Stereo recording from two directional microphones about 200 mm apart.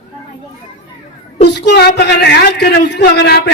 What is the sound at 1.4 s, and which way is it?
A man's voice, 55° left (ahead or behind).